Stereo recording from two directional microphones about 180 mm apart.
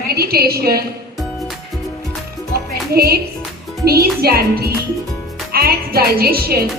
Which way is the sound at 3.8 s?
60° right (ahead or behind).